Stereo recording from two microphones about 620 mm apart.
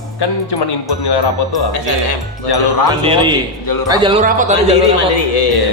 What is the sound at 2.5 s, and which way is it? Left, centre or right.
Speech, left.